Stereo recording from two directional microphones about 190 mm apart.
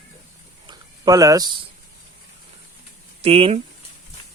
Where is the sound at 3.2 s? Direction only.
30° right (ahead or behind).